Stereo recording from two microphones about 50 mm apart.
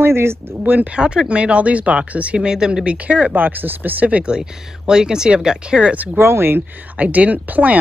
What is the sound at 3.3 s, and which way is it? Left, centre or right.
Speech, right.